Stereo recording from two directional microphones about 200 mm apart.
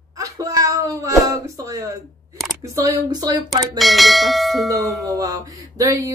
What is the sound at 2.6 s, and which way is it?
Speech, 15° right (ahead or behind).